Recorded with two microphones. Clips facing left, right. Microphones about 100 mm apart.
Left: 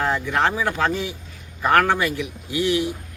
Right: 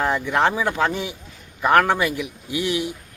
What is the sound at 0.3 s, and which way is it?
Speech, 20° right (ahead or behind).